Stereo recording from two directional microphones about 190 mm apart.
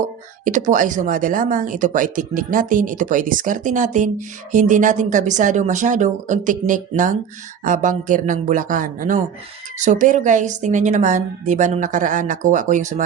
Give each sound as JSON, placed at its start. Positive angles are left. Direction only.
{"t": 0.4, "sound": "a woman's voice", "side_deg": -40}